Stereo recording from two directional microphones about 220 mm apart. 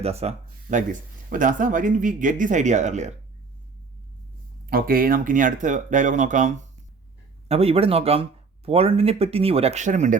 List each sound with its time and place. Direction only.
0.0 s speech: 30° right (ahead or behind)
4.6 s speech: 40° right (ahead or behind)